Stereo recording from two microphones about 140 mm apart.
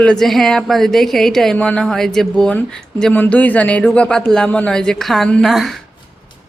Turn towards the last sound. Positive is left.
turn(degrees=0)  # may be behind; listen again after turning